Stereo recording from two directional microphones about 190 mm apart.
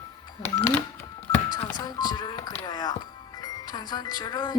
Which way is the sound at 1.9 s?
20° left (ahead or behind).